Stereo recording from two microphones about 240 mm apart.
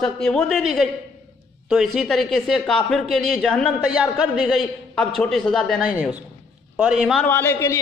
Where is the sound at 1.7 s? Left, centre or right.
Centre.